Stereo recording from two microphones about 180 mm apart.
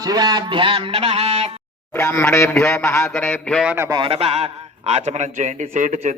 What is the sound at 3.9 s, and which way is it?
A man's voice, 25° right (ahead or behind).